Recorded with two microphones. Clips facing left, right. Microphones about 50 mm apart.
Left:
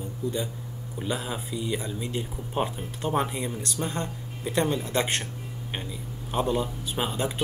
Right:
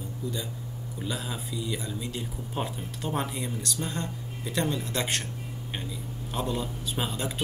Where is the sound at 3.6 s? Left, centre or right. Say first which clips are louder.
Left 2 dB; left.